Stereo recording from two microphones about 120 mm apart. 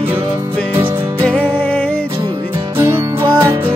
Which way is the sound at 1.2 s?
10° left (ahead or behind).